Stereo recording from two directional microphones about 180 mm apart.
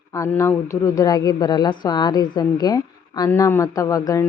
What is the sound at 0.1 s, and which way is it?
Speech, 15° left (ahead or behind).